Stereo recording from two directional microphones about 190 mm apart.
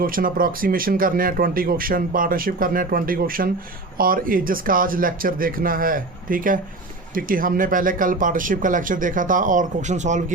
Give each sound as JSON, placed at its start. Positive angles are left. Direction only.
{"t": 0.0, "sound": "speech", "side_deg": -45}